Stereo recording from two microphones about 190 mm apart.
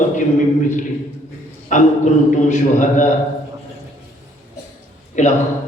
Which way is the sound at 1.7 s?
40° left (ahead or behind).